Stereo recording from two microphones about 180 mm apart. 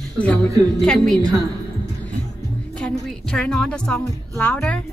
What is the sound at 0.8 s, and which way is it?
Speech, 5° left (ahead or behind).